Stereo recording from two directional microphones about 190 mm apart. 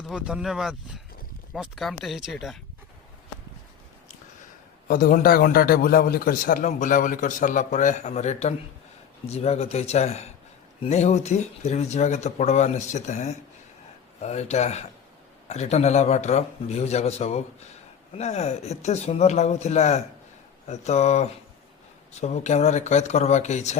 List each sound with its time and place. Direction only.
0.1 s speech: 5° right (ahead or behind)
4.9 s a man's voice: 45° left (ahead or behind)